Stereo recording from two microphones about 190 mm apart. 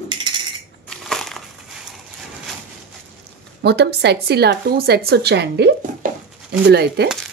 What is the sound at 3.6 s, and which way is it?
Speech, 60° right (ahead or behind).